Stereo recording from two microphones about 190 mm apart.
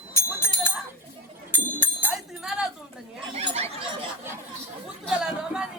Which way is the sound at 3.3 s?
35° right (ahead or behind).